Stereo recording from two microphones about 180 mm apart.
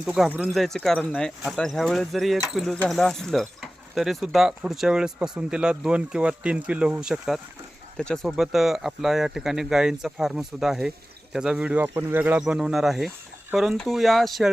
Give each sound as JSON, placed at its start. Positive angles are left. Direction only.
{"t": 0.0, "sound": "speech", "side_deg": -5}